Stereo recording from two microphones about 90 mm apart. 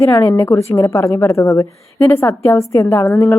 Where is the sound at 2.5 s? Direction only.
35° left (ahead or behind).